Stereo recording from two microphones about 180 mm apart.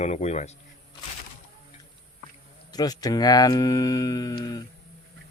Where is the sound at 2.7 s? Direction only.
20° left (ahead or behind).